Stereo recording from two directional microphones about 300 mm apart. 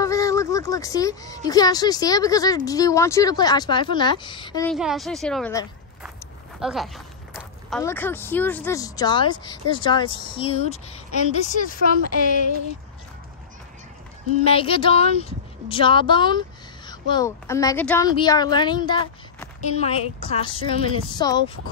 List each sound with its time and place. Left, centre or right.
0.0 s speech: centre
4.7 s a woman's voice: centre; by 11.6 s left
14.4 s speech: centre